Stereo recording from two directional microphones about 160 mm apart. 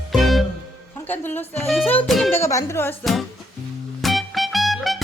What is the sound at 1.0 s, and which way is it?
Music, 10° left (ahead or behind).